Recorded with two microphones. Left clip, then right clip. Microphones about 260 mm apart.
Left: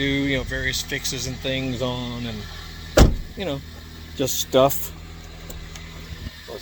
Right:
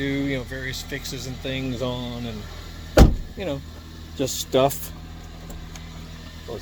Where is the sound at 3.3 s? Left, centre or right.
Centre.